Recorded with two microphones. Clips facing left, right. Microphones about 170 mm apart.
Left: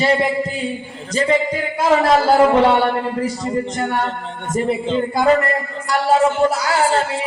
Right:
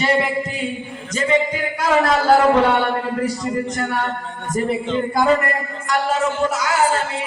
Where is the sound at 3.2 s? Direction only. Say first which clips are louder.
Left 1 dB; 25° left (ahead or behind).